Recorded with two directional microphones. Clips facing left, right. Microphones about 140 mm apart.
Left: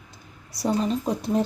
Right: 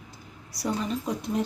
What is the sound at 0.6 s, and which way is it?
Speech, 30° left (ahead or behind).